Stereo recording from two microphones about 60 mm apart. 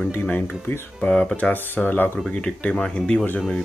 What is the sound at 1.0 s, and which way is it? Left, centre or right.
Speech, centre.